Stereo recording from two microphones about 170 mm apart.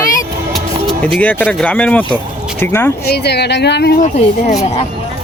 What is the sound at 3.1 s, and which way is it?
Speech, 75° left (ahead or behind).